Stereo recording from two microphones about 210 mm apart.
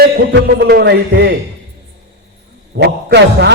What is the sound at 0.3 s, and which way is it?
A man's voice, 50° right (ahead or behind).